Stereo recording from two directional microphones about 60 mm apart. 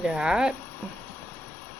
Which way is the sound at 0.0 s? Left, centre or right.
Centre.